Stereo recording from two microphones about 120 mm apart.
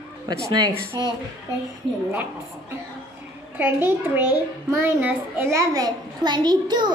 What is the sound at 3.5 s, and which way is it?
A child's voice, 10° right (ahead or behind).